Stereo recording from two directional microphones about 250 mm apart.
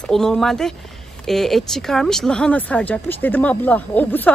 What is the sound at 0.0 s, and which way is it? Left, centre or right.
Speech, centre.